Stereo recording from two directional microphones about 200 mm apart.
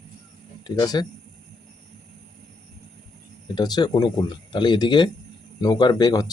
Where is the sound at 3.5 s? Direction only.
20° left (ahead or behind).